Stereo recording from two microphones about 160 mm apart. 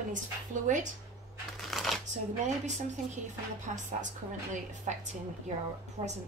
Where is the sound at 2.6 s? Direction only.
45° right (ahead or behind).